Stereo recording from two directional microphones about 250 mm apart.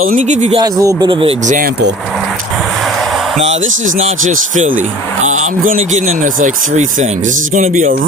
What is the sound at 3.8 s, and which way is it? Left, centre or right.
Speech, right.